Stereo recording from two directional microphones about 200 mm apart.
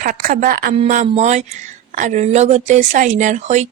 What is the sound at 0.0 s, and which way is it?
Speech, 40° right (ahead or behind).